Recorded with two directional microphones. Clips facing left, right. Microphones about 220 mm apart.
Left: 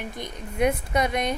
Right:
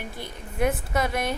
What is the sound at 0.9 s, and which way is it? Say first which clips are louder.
Speech: left 2 dB; 20° left (ahead or behind).